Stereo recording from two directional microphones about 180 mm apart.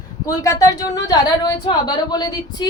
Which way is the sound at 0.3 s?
20° left (ahead or behind).